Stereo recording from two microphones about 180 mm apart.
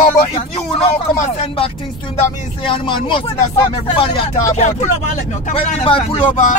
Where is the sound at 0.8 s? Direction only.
35° left (ahead or behind).